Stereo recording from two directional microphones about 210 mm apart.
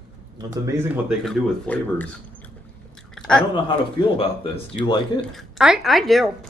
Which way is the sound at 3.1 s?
5° left (ahead or behind).